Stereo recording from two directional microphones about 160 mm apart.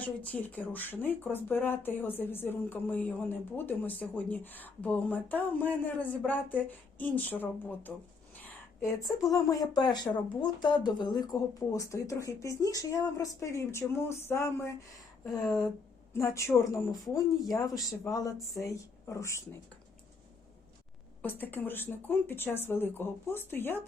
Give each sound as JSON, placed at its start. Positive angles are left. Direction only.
{"t": 0.0, "sound": "speech", "side_deg": 10}
{"t": 15.3, "sound": "speech", "side_deg": 0}
{"t": 16.1, "sound": "speech", "side_deg": 15}
{"t": 21.2, "sound": "speech", "side_deg": 10}